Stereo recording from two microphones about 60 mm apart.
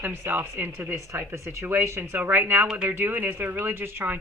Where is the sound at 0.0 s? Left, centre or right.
Right.